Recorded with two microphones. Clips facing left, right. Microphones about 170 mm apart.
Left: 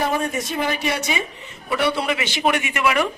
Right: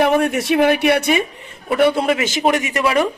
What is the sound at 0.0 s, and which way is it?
Speech, 70° right (ahead or behind).